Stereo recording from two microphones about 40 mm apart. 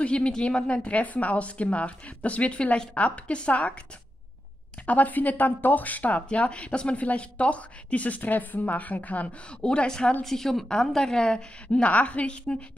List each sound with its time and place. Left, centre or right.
0.0 s speech: left
4.8 s speech: left
9.5 s a woman's voice: left
10.2 s a woman's voice: centre
11.6 s speech: left